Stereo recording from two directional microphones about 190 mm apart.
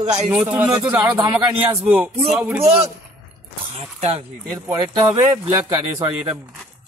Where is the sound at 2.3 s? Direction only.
10° right (ahead or behind).